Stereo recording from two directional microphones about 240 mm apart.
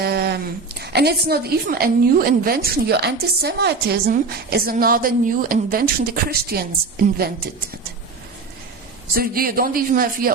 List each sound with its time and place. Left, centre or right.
0.0 s a woman's voice: right
9.1 s a woman's voice: right